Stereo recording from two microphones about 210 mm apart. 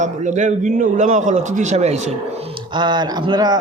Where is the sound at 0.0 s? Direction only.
35° right (ahead or behind).